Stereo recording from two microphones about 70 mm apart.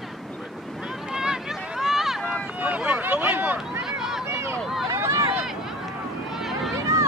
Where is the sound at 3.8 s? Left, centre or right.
Centre.